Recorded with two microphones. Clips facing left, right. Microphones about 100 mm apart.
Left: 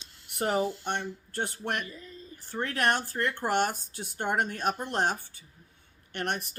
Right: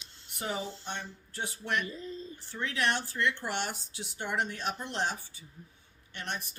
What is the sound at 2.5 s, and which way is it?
Speech, 50° left (ahead or behind).